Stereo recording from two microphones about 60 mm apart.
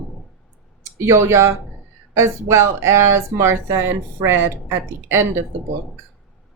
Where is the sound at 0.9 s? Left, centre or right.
Right.